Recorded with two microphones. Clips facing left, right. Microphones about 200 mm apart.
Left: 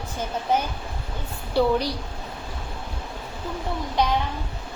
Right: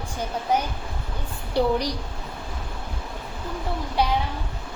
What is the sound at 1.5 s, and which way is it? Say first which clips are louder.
Speech: left 1 dB; 15° right (ahead or behind).